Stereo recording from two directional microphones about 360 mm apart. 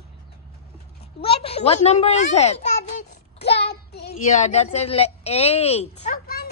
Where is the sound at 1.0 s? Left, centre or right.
Centre.